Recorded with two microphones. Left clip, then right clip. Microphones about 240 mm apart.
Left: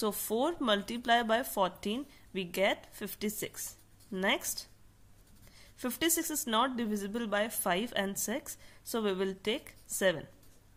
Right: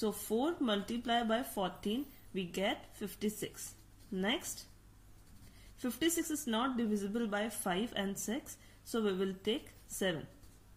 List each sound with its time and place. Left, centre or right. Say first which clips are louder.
0.0 s speech: left 3 dB; left
5.8 s speech: left 2 dB; left